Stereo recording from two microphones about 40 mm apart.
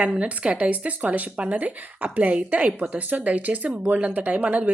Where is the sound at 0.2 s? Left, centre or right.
Right.